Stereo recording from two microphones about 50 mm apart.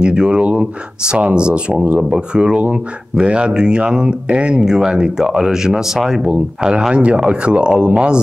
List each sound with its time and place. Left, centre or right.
0.0 s speech: centre
6.3 s speech: centre